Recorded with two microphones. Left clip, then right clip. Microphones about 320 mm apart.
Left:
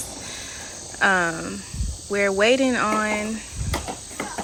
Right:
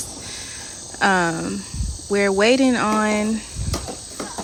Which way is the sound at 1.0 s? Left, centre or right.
Centre.